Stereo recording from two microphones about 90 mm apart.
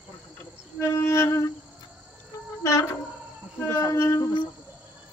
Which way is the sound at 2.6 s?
35° left (ahead or behind).